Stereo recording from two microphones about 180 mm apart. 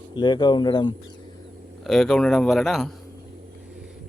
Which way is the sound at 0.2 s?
25° left (ahead or behind).